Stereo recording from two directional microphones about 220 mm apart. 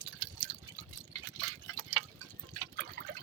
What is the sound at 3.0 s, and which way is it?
Water, 50° right (ahead or behind).